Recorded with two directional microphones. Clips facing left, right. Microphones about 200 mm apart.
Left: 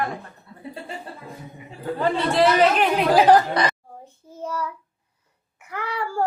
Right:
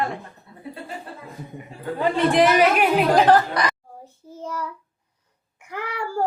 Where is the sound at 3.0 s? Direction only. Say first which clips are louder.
Left 2 dB; 10° left (ahead or behind).